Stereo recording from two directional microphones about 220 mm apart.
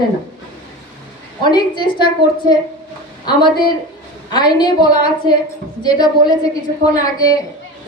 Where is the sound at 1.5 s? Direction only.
20° left (ahead or behind).